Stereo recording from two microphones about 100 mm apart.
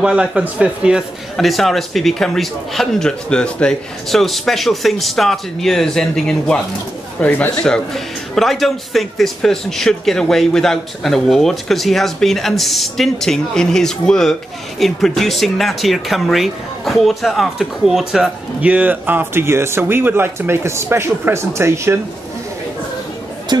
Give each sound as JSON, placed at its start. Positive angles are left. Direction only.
{"t": 0.0, "sound": "speech", "side_deg": -10}
{"t": 1.3, "sound": "a man's voice", "side_deg": 0}
{"t": 7.6, "sound": "a man's voice", "side_deg": 5}
{"t": 18.6, "sound": "speech", "side_deg": -15}